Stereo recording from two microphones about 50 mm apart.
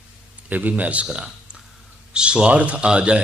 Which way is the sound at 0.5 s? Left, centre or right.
Right.